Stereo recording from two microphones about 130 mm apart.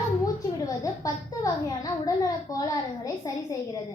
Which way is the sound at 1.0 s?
25° left (ahead or behind).